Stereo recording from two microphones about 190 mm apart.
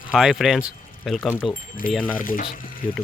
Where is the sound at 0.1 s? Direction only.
5° right (ahead or behind).